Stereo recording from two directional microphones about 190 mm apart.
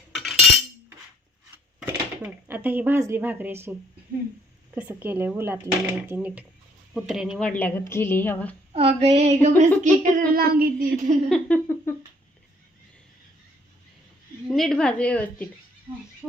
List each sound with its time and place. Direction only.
0.1 s cutlery: centre (ahead or behind)
1.8 s speech: 5° right (ahead or behind); by 8.5 s 10° left (ahead or behind)
8.7 s a sound: 30° right (ahead or behind)
9.6 s speech: 45° right (ahead or behind)
11.3 s speech: 10° left (ahead or behind)
14.4 s a woman's voice: centre (ahead or behind)